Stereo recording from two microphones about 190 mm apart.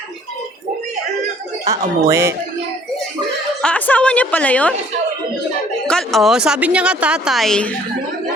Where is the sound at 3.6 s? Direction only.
5° left (ahead or behind).